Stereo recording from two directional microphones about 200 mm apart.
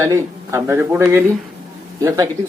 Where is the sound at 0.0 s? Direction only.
15° right (ahead or behind).